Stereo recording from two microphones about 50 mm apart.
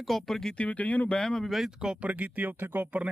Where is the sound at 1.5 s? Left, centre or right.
Centre.